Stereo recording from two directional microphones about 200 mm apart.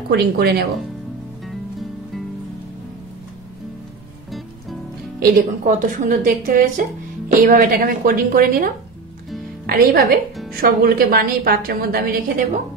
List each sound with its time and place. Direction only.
0.1 s a woman's voice: 55° right (ahead or behind)
5.2 s a woman's voice: 45° right (ahead or behind)
10.0 s speech: centre (ahead or behind)
10.5 s a woman's voice: 50° right (ahead or behind)